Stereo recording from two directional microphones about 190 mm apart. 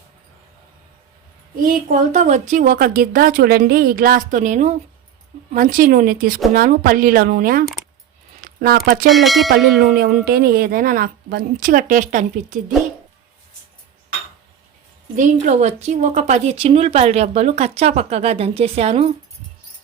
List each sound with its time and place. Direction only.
1.5 s a woman's voice: 45° right (ahead or behind)
8.4 s a sound: 50° right (ahead or behind)
9.0 s speech: centre (ahead or behind)
9.8 s a woman's voice: 50° right (ahead or behind)
15.1 s speech: 40° right (ahead or behind)